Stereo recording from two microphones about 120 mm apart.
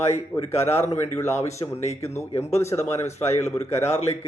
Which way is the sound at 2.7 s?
65° left (ahead or behind).